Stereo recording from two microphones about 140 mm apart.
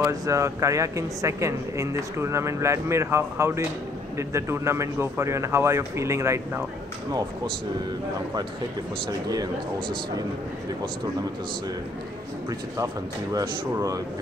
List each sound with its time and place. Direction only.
0.0 s speech: 20° right (ahead or behind)
9.3 s speech: 25° right (ahead or behind)
12.4 s speech: 25° right (ahead or behind)